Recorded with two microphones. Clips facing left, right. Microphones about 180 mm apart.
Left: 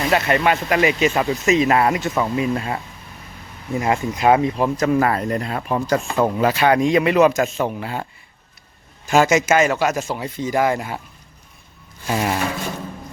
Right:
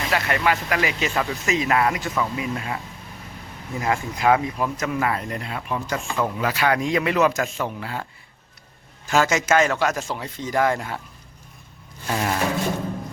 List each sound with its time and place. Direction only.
0.1 s speech: 25° left (ahead or behind)
3.8 s speech: 20° left (ahead or behind)
6.5 s speech: 25° left (ahead or behind)
9.0 s speech: 15° left (ahead or behind)
12.0 s speech: 15° left (ahead or behind)